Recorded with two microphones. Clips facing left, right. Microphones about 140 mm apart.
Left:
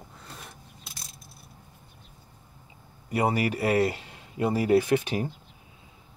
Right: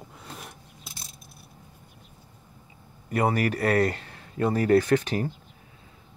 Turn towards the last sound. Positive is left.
turn(degrees=10)  # may be behind; listen again after turning